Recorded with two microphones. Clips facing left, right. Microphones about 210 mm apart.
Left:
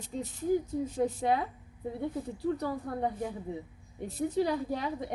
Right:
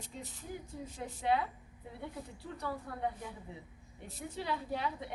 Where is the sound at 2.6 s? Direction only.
40° left (ahead or behind).